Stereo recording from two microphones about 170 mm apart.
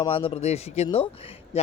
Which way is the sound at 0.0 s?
30° left (ahead or behind).